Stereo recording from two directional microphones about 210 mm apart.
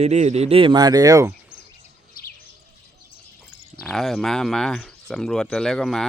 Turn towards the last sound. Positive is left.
turn(degrees=0)  # may be behind; listen again after turning